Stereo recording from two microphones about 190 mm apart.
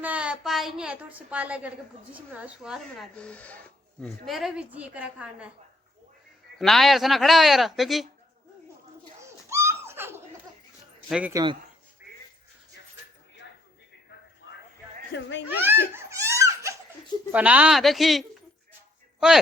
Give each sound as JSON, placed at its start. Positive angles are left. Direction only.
{"t": 0.0, "sound": "a woman's voice", "side_deg": -5}
{"t": 6.6, "sound": "speech", "side_deg": 0}
{"t": 9.2, "sound": "a sound", "side_deg": -15}
{"t": 11.1, "sound": "speech", "side_deg": -5}
{"t": 14.4, "sound": "a sound", "side_deg": 70}
{"t": 15.1, "sound": "speech", "side_deg": 65}
{"t": 15.4, "sound": "crying", "side_deg": -10}
{"t": 17.3, "sound": "speech", "side_deg": -5}